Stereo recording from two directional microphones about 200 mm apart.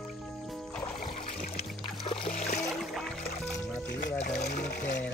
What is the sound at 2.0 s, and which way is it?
Music, 25° left (ahead or behind).